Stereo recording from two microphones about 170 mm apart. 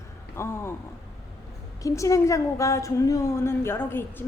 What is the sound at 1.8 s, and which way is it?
A woman's voice, 20° left (ahead or behind).